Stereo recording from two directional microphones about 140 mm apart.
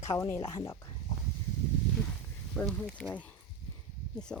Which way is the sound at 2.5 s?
10° left (ahead or behind).